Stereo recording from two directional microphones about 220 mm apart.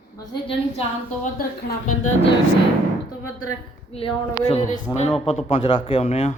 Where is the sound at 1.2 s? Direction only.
40° left (ahead or behind).